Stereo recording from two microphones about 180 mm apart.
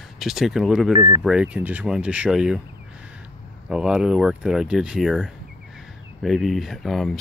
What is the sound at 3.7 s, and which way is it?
Speech, 5° right (ahead or behind).